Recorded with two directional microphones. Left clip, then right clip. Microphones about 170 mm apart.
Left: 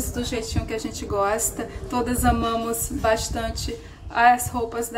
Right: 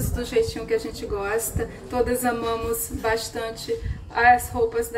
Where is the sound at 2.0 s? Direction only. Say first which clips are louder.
Even; 20° left (ahead or behind).